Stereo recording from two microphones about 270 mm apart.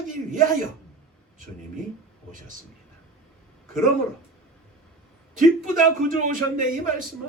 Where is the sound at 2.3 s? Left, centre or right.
Right.